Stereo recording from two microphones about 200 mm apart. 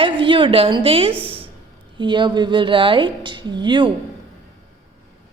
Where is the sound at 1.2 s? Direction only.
25° right (ahead or behind).